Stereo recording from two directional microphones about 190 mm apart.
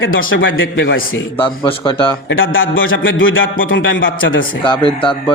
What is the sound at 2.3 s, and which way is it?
Speech, 90° left.